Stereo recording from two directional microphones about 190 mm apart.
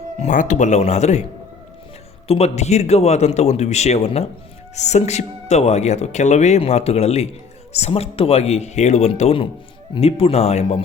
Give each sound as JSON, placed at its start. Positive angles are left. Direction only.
{"t": 0.2, "sound": "speech", "side_deg": 40}
{"t": 2.2, "sound": "speech", "side_deg": 30}